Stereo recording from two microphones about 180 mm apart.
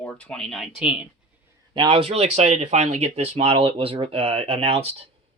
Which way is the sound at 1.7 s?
30° right (ahead or behind).